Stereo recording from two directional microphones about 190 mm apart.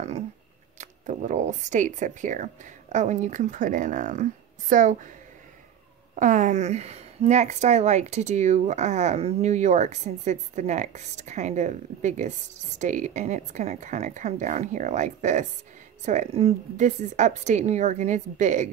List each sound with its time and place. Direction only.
0.7 s a woman's voice: 40° right (ahead or behind)
6.1 s a woman's voice: 40° right (ahead or behind)